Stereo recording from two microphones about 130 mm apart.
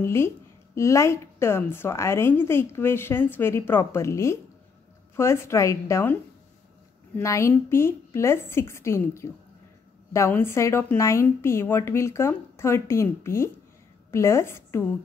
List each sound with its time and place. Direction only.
0.0 s a woman's voice: 20° left (ahead or behind)
7.2 s a woman's voice: 20° left (ahead or behind)